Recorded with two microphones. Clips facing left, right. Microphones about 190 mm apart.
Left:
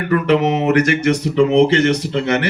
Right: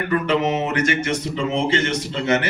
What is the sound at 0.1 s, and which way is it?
A man's voice, 65° left (ahead or behind).